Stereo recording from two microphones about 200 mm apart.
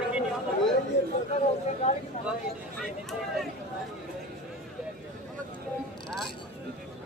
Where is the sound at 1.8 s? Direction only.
35° left (ahead or behind).